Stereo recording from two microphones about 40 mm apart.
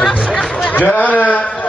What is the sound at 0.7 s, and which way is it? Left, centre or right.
Speech, left.